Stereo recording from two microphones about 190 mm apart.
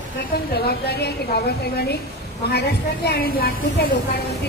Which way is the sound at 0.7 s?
60° left (ahead or behind).